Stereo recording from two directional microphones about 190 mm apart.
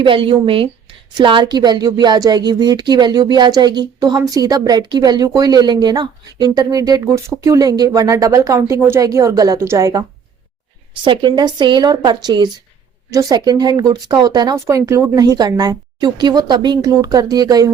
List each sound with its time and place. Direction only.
0.0 s speech: 25° right (ahead or behind)
11.0 s speech: 25° right (ahead or behind)